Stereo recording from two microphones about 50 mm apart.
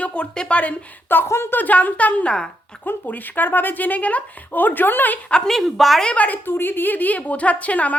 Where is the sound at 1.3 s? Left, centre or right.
Left.